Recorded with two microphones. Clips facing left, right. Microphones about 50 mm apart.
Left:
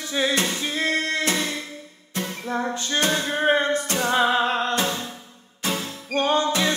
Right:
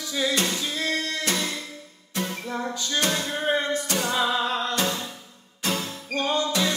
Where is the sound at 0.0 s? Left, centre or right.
Left.